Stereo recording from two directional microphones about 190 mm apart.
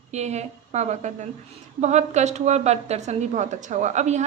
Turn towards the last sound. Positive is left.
turn(degrees=-35)  # may be behind; listen again after turning